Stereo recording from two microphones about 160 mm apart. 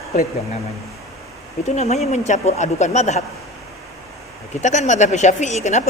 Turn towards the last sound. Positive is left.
turn(degrees=45)  # may be behind; listen again after turning